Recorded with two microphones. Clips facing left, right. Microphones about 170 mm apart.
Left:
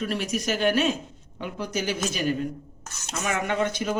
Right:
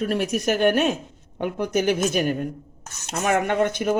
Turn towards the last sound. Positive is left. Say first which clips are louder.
# right 4 dB
turn(degrees=-55)  # may be behind; listen again after turning